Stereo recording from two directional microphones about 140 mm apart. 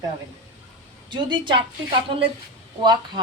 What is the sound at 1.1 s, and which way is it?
A woman's voice, 35° right (ahead or behind).